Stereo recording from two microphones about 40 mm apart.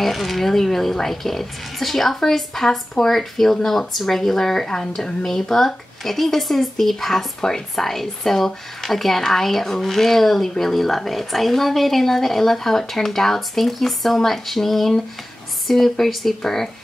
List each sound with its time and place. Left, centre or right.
0.0 s a woman's voice: centre